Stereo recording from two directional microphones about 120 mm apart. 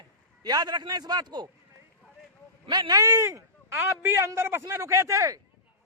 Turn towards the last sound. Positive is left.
turn(degrees=-25)  # may be behind; listen again after turning